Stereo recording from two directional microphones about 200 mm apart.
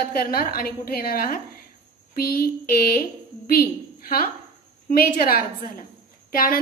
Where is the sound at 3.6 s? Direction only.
50° left (ahead or behind).